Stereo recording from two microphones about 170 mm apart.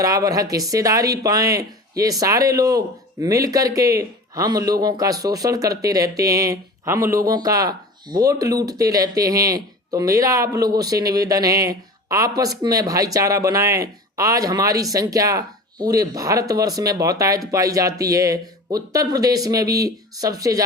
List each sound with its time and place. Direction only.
0.0 s speech: 20° right (ahead or behind)